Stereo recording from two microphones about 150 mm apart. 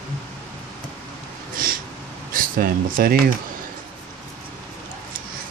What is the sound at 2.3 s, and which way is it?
Speech, 70° right (ahead or behind).